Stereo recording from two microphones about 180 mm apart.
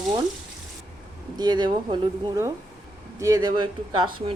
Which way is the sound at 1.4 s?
25° right (ahead or behind).